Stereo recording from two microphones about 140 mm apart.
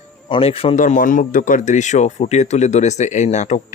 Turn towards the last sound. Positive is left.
turn(degrees=55)  # may be behind; listen again after turning